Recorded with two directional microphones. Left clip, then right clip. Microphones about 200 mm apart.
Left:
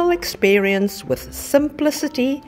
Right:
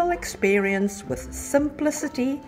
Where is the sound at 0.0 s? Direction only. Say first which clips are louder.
Left 5 dB; 40° left (ahead or behind).